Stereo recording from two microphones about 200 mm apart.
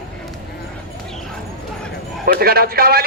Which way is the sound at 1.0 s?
Centre (ahead or behind).